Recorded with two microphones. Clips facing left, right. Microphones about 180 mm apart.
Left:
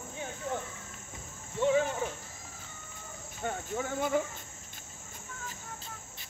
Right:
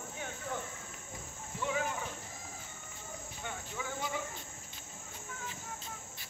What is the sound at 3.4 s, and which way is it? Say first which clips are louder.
Speech: left 9 dB; 50° left (ahead or behind).